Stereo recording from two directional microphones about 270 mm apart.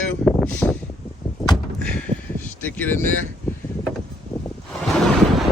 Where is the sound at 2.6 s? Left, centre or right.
Centre.